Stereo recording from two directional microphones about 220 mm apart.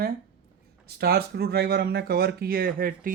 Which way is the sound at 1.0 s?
45° right (ahead or behind).